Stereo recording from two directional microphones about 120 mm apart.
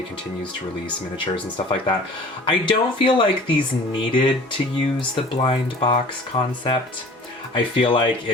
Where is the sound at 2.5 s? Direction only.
45° left (ahead or behind).